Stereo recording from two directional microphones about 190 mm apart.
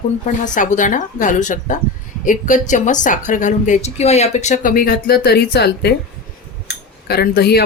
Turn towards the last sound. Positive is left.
turn(degrees=55)  # may be behind; listen again after turning